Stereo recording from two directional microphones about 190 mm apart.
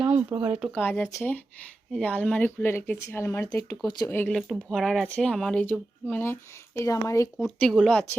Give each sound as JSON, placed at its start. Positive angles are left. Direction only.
{"t": 0.0, "sound": "a sound", "side_deg": -10}
{"t": 0.7, "sound": "speech", "side_deg": 10}
{"t": 7.3, "sound": "speech", "side_deg": 0}